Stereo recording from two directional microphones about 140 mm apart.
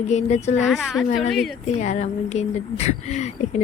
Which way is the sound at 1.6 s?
55° left (ahead or behind).